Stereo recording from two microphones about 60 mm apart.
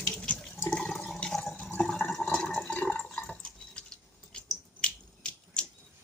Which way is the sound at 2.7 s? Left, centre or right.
Left.